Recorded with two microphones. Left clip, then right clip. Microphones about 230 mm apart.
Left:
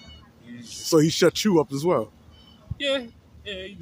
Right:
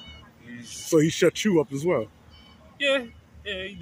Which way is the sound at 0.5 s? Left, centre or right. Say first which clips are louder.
Right 1 dB; centre.